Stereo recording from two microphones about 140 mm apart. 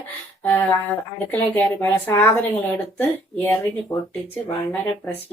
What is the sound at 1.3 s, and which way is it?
A woman's voice, 15° left (ahead or behind).